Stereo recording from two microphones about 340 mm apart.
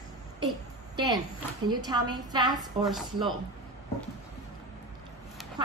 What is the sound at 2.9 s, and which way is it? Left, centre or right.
Speech, centre.